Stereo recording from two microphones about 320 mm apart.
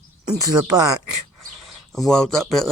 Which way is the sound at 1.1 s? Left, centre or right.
Right.